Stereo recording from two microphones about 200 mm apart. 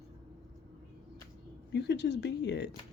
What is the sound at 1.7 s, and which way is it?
Speech, 55° left (ahead or behind).